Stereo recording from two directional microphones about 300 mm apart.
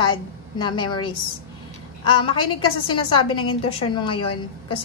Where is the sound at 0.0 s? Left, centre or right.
Centre.